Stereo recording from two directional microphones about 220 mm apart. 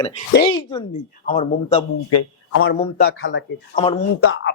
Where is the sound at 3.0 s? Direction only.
55° left (ahead or behind).